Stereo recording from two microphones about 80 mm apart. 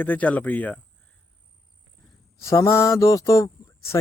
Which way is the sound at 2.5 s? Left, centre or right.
Left.